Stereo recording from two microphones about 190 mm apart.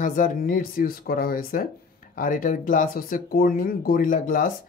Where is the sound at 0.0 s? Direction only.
45° left (ahead or behind).